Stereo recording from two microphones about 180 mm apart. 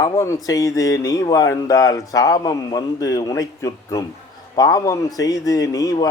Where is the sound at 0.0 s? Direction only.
15° left (ahead or behind).